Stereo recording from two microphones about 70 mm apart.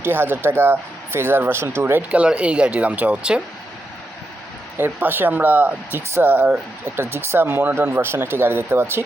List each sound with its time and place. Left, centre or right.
0.0 s speech: right
2.0 s speech: centre
4.8 s speech: right